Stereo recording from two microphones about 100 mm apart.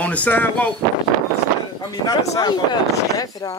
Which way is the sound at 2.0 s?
45° left (ahead or behind).